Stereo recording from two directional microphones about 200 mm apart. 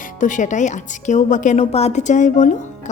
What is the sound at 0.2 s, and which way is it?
A woman's voice, 40° left (ahead or behind).